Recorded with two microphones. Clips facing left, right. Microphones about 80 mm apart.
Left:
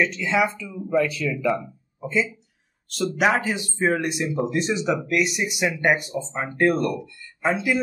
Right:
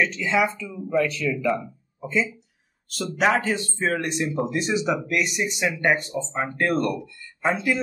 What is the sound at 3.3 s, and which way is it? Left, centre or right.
Speech, centre.